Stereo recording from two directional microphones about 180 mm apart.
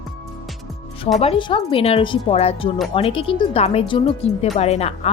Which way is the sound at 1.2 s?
30° left (ahead or behind).